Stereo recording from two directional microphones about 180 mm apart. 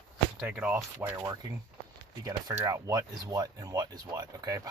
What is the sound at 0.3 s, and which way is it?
Speech, 5° right (ahead or behind).